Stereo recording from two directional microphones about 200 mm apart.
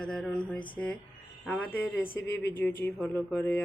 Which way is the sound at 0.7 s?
5° left (ahead or behind).